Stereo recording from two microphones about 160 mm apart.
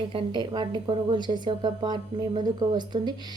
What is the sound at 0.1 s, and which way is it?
A woman's voice, 35° right (ahead or behind).